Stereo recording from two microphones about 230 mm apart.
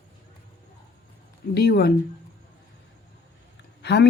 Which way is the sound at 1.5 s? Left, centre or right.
Left.